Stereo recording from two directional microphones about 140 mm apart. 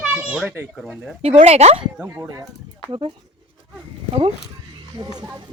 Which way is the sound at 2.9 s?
35° right (ahead or behind).